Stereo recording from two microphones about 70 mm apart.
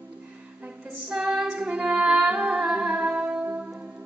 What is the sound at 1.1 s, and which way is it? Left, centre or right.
Female singing, centre.